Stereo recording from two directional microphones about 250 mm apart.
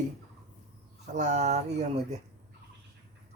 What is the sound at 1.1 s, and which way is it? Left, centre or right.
Speech, right.